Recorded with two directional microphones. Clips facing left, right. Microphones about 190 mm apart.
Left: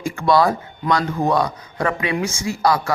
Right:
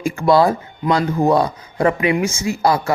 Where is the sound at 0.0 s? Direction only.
25° right (ahead or behind).